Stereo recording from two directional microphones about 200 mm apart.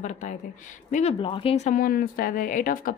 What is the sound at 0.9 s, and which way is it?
A woman's voice, 30° left (ahead or behind).